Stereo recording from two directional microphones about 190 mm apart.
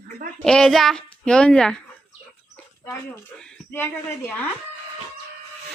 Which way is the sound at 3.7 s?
10° left (ahead or behind).